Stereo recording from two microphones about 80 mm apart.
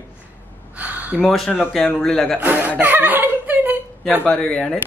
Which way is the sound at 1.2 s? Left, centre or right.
Centre.